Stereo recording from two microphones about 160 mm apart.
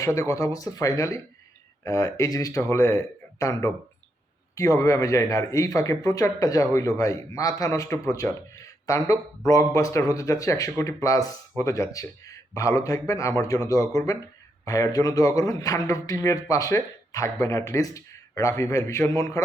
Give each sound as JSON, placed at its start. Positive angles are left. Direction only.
{"t": 0.0, "sound": "speech", "side_deg": 20}